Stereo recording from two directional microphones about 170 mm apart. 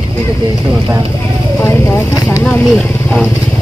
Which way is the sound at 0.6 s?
20° right (ahead or behind).